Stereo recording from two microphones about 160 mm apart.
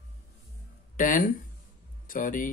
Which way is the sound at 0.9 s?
55° left (ahead or behind).